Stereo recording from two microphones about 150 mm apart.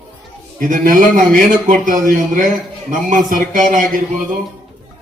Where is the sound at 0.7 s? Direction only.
60° right (ahead or behind).